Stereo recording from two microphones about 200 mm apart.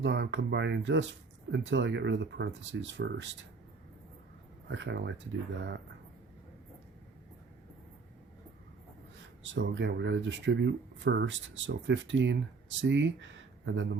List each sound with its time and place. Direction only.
0.0 s speech: 60° right (ahead or behind)
4.7 s speech: 60° right (ahead or behind)
9.4 s speech: 60° right (ahead or behind)